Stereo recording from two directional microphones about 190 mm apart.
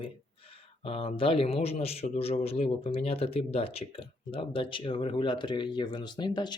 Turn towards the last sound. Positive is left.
turn(degrees=25)  # may be behind; listen again after turning